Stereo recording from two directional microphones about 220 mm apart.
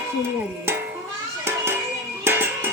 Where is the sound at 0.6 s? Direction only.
10° right (ahead or behind).